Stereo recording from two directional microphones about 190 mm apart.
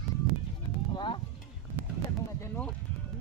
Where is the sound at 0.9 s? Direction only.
25° left (ahead or behind).